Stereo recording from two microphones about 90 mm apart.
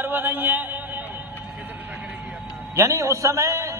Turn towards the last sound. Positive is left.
turn(degrees=-35)  # may be behind; listen again after turning